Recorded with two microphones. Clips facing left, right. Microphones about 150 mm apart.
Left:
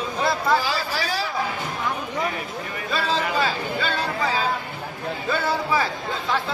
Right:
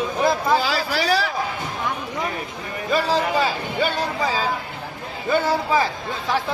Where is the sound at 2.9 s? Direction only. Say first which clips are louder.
Right 4 dB; 15° right (ahead or behind).